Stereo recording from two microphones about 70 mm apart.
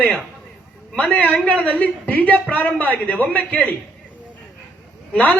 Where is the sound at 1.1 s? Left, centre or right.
Left.